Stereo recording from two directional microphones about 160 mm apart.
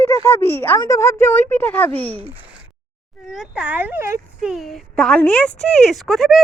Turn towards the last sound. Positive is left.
turn(degrees=0)  # may be behind; listen again after turning